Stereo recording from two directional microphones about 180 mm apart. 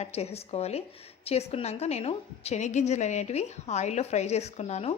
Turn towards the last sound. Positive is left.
turn(degrees=35)  # may be behind; listen again after turning